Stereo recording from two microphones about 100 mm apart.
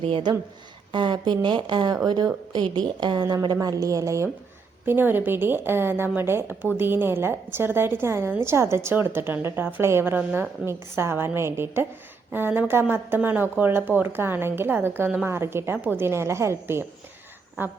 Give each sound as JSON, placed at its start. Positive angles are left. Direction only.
{"t": 0.9, "sound": "a woman's voice", "side_deg": -50}
{"t": 4.9, "sound": "a woman's voice", "side_deg": -20}